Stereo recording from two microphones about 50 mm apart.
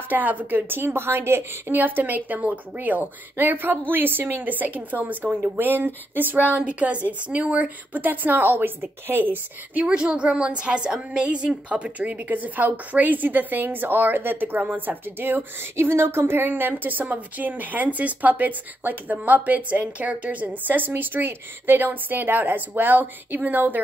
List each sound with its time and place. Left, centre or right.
0.1 s a woman's voice: right
1.8 s a woman's voice: right
6.5 s a woman's voice: right
9.8 s a woman's voice: right